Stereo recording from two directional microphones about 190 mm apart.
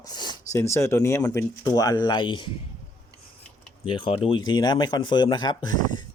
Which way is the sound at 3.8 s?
30° left (ahead or behind).